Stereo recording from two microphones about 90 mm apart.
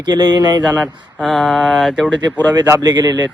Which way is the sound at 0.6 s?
10° right (ahead or behind).